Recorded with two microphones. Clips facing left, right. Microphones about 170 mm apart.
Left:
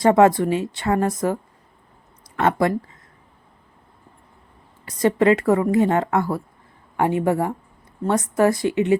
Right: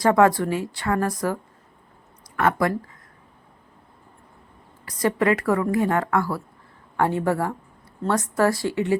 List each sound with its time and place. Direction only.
0.0 s a woman's voice: 20° left (ahead or behind)
4.9 s a woman's voice: 25° left (ahead or behind)